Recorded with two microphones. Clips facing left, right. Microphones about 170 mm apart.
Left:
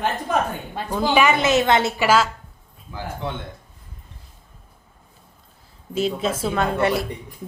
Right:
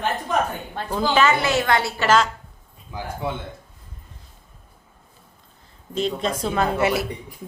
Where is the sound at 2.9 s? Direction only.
15° right (ahead or behind).